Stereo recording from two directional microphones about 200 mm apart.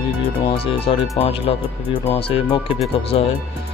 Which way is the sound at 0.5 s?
30° left (ahead or behind).